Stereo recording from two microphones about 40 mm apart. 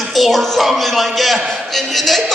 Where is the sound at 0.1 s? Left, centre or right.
Centre.